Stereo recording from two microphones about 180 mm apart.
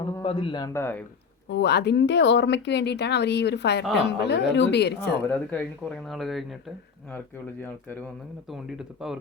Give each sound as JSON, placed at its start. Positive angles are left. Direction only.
{"t": 0.2, "sound": "speech", "side_deg": 30}
{"t": 1.5, "sound": "speech", "side_deg": 70}
{"t": 5.5, "sound": "speech", "side_deg": 5}
{"t": 8.4, "sound": "speech", "side_deg": 0}